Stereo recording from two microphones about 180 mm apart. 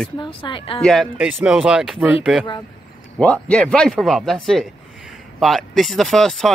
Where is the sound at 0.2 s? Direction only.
25° left (ahead or behind).